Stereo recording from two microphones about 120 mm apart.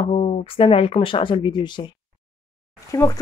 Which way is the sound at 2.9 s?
25° left (ahead or behind).